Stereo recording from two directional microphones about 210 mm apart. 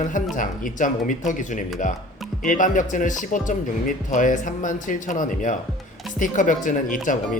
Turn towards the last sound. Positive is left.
turn(degrees=40)  # may be behind; listen again after turning